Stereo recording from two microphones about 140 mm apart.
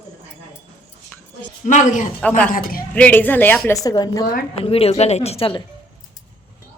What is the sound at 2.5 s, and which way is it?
Speech, 85° left.